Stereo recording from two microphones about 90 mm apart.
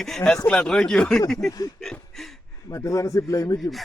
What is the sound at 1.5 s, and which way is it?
Speech, 45° left (ahead or behind).